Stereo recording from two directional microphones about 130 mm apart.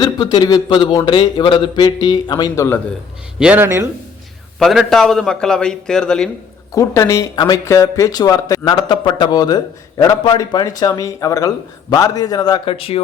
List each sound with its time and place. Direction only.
0.0 s speech: 30° left (ahead or behind)
3.3 s speech: 5° right (ahead or behind)
3.6 s speech: 20° right (ahead or behind)
4.6 s a man's voice: centre (ahead or behind)
6.7 s speech: 25° left (ahead or behind)
12.6 s speech: 45° left (ahead or behind)